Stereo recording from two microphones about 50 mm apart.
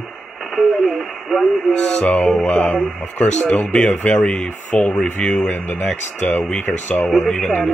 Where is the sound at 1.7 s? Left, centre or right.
Centre.